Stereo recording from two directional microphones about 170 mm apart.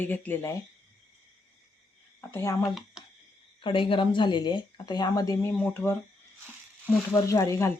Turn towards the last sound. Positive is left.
turn(degrees=15)  # may be behind; listen again after turning